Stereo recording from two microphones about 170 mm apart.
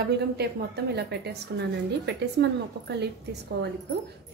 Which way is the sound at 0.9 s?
80° right.